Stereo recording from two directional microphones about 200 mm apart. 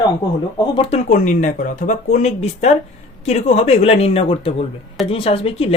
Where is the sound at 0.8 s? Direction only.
35° left (ahead or behind).